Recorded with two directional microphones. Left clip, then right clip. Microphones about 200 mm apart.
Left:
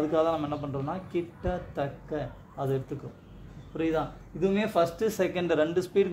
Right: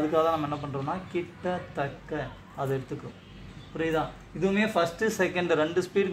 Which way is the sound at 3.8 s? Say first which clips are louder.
Right 1 dB; 60° left (ahead or behind).